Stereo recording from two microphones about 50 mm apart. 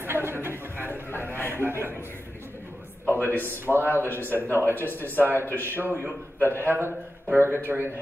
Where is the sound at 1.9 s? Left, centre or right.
Left.